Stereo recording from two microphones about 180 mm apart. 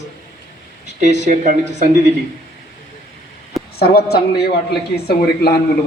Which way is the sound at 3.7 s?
60° left (ahead or behind).